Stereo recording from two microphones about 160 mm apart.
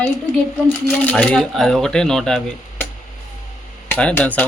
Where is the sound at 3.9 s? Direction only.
10° left (ahead or behind).